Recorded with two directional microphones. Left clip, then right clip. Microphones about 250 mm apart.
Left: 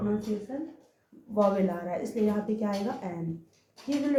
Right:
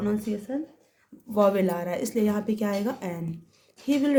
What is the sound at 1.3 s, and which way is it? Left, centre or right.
Speech, right.